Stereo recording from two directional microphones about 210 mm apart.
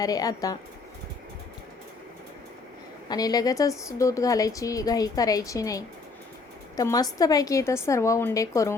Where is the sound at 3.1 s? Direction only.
20° left (ahead or behind).